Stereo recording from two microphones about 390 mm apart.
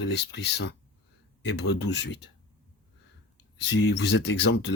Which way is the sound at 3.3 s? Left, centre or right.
Left.